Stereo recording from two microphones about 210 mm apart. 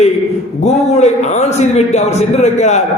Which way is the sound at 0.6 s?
30° left (ahead or behind).